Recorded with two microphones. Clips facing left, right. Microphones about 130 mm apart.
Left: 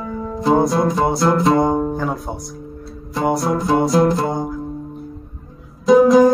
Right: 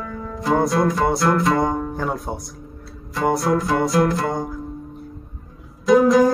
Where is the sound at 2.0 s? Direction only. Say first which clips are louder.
Left 2 dB; centre (ahead or behind).